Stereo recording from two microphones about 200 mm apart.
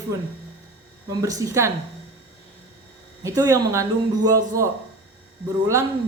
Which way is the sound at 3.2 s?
15° right (ahead or behind).